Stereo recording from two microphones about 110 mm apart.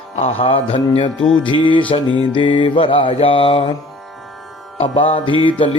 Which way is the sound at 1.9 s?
50° left (ahead or behind).